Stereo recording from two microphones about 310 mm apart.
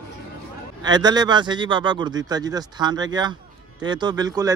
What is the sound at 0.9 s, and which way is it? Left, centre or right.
Speech, centre.